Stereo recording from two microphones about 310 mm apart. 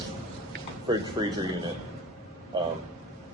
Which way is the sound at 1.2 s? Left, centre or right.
Centre.